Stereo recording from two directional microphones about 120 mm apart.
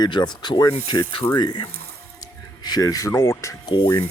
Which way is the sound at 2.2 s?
35° left (ahead or behind).